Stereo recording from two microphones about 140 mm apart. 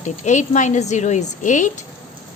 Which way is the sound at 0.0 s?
60° left (ahead or behind).